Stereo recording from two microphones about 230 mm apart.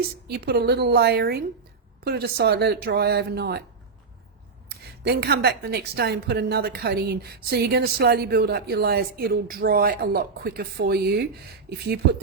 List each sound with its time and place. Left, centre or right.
0.3 s a woman's voice: right
4.7 s a woman's voice: right